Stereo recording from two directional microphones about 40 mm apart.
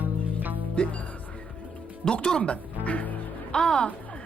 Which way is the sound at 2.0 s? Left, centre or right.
Left.